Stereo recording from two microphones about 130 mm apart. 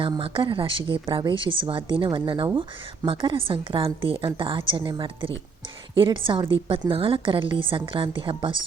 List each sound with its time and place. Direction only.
0.0 s speech: 40° right (ahead or behind)